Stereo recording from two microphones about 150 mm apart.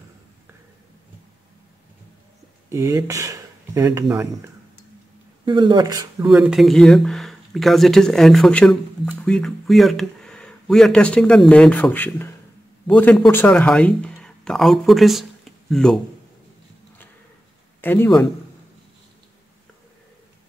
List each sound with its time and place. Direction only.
2.7 s speech: 20° right (ahead or behind)
5.4 s speech: 30° right (ahead or behind)
6.1 s speech: 5° right (ahead or behind)
17.8 s a man's voice: 15° left (ahead or behind)